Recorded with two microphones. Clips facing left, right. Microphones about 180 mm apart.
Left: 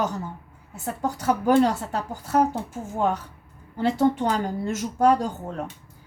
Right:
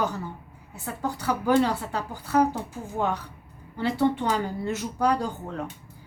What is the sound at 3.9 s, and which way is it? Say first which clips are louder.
Speech: left 1 dB; 45° left (ahead or behind).